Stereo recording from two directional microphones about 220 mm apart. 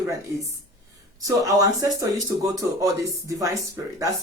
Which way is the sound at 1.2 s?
15° right (ahead or behind).